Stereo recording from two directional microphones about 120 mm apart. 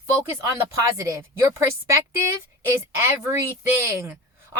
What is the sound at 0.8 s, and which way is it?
Speech, 25° right (ahead or behind).